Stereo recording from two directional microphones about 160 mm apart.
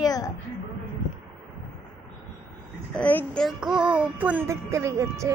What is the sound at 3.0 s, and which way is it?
Speech, 10° left (ahead or behind).